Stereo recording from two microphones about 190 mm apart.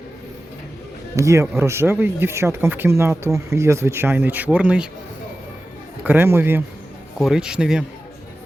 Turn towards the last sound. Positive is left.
turn(degrees=-5)  # may be behind; listen again after turning